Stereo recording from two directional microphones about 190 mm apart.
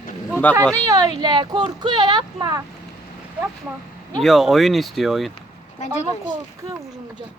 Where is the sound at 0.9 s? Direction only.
20° right (ahead or behind).